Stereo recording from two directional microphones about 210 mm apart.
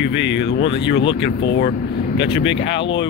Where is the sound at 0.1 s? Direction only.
55° left (ahead or behind).